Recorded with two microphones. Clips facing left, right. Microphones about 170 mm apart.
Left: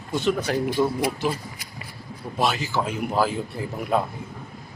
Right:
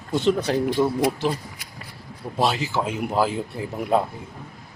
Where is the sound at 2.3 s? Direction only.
30° right (ahead or behind).